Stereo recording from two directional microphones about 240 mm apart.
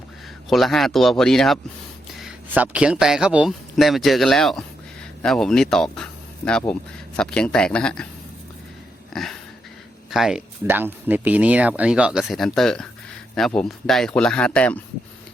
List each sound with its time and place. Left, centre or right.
0.5 s speech: centre
9.1 s dog: centre
10.1 s speech: centre